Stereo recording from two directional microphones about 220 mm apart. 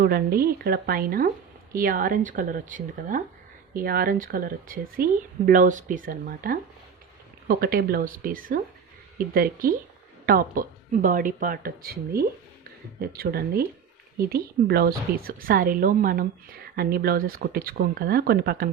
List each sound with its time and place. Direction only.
0.0 s a woman's voice: 45° right (ahead or behind)